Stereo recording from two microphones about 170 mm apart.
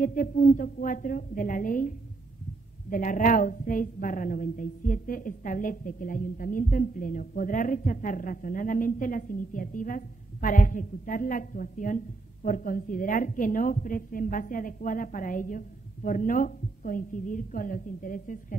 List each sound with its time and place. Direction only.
0.0 s a woman's voice: 55° left (ahead or behind)